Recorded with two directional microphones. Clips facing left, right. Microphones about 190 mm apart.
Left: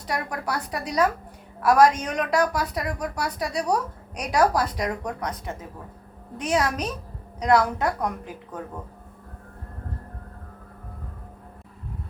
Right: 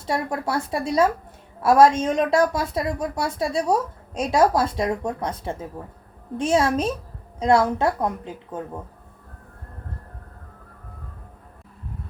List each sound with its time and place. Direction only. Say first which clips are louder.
0.0 s a woman's voice: right 4 dB; 25° right (ahead or behind)